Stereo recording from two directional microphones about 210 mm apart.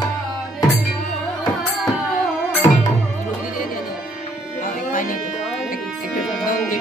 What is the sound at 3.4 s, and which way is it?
Music, 40° left (ahead or behind).